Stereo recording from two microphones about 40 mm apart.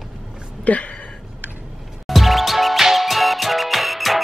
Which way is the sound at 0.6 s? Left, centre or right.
Left.